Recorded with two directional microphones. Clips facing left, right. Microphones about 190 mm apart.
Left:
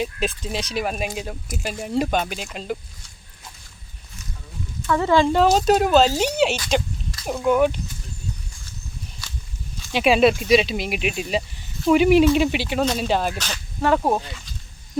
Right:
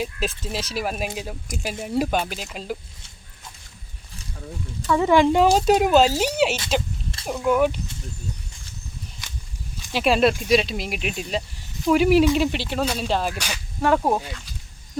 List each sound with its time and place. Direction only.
0.0 s speech: centre (ahead or behind)
4.9 s speech: 10° right (ahead or behind)
9.2 s walk: 20° right (ahead or behind)
9.9 s speech: centre (ahead or behind)
13.4 s speech: 10° right (ahead or behind)